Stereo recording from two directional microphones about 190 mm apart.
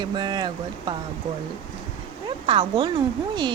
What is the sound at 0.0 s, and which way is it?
Speech, 25° right (ahead or behind).